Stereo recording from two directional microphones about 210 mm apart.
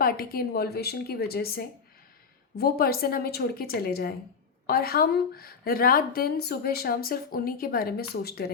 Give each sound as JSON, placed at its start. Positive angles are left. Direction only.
{"t": 0.0, "sound": "speech", "side_deg": 45}